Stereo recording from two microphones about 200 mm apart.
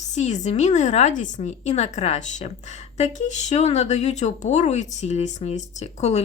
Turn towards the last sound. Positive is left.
turn(degrees=35)  # may be behind; listen again after turning